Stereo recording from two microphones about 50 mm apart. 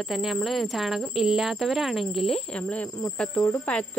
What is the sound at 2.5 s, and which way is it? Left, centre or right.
Speech, left.